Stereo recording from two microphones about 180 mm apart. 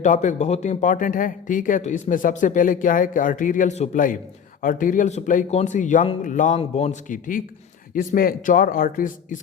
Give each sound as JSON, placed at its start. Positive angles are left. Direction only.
{"t": 0.0, "sound": "speech", "side_deg": 45}
{"t": 6.6, "sound": "a man's voice", "side_deg": 35}